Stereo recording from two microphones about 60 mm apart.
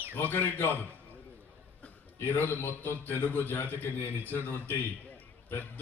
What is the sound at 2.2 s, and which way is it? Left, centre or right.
A man's voice, left.